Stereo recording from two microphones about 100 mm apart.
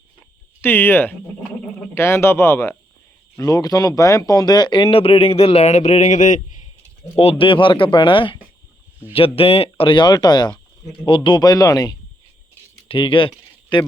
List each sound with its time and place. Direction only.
0.6 s speech: 20° left (ahead or behind); by 5.9 s 85° left
7.2 s speech: 70° left (ahead or behind)
9.1 s speech: 70° left (ahead or behind); by 10.5 s 45° left (ahead or behind)
11.0 s speech: 55° left (ahead or behind); by 11.9 s 35° left (ahead or behind)
12.9 s speech: 60° left (ahead or behind)